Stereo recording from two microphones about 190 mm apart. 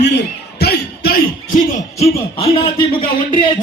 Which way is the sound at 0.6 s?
55° left (ahead or behind).